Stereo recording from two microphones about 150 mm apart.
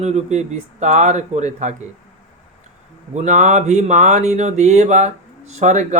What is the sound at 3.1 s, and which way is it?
Speech, 55° right (ahead or behind).